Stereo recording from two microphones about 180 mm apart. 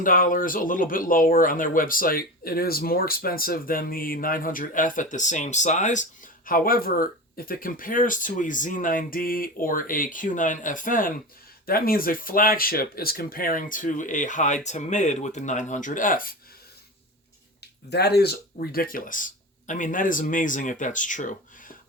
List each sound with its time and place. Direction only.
0.0 s speech: 50° left (ahead or behind)
17.6 s speech: 65° left (ahead or behind); by 21.8 s 45° left (ahead or behind)